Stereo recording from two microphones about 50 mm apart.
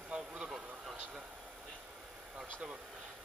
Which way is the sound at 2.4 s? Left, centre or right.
Centre.